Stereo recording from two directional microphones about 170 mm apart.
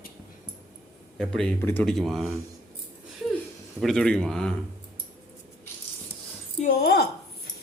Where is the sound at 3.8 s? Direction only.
5° left (ahead or behind).